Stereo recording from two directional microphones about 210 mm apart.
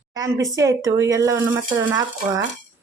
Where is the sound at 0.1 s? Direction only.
15° right (ahead or behind).